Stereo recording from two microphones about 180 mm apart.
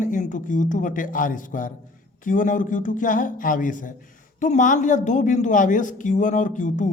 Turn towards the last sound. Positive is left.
turn(degrees=45)  # may be behind; listen again after turning